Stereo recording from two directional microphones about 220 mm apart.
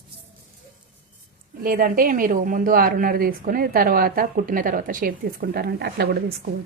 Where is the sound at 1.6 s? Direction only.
40° right (ahead or behind).